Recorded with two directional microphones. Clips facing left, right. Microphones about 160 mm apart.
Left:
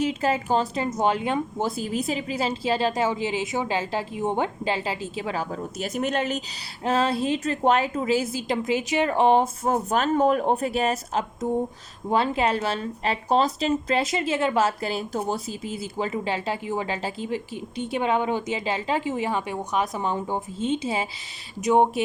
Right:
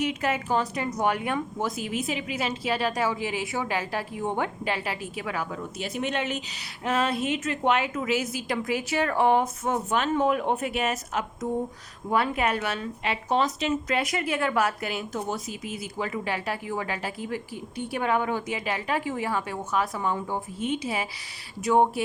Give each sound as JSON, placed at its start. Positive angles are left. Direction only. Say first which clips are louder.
{"t": 0.0, "sound": "a woman's voice", "louder": "left 3 dB", "side_deg": 30}
{"t": 9.7, "sound": "a woman's voice", "louder": "left 3 dB", "side_deg": 40}